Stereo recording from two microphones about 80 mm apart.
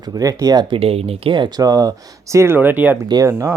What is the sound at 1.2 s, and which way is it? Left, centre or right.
Speech, right.